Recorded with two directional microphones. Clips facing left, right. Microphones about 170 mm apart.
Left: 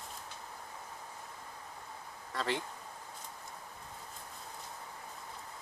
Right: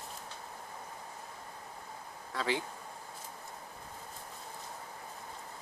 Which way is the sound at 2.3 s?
5° right (ahead or behind).